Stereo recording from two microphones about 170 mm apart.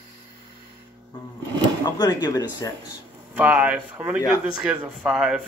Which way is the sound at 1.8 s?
25° left (ahead or behind).